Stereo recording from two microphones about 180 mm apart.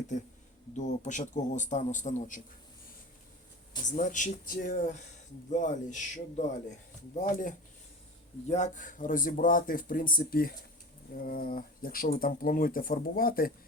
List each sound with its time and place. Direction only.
0.1 s speech: 45° left (ahead or behind)
3.9 s speech: 45° left (ahead or behind)